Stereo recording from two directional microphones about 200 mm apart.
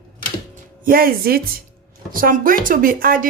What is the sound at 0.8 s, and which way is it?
A woman's voice, 45° right (ahead or behind).